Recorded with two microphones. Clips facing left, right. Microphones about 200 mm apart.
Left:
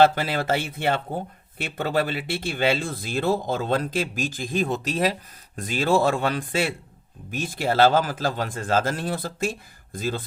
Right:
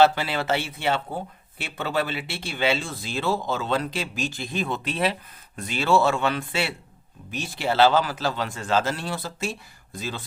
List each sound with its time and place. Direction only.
0.0 s speech: 45° left (ahead or behind)